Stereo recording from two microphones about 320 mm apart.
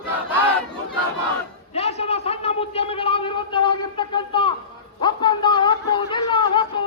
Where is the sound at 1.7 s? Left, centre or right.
Centre.